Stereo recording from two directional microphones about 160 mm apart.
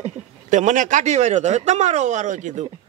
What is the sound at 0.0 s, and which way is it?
Speech, 50° right (ahead or behind).